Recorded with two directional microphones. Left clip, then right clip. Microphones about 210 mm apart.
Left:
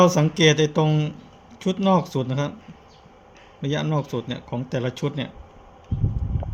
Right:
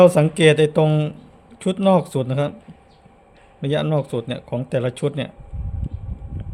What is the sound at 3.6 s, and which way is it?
Speech, 25° right (ahead or behind).